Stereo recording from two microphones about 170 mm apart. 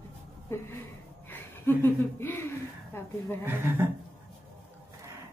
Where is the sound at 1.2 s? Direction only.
15° left (ahead or behind).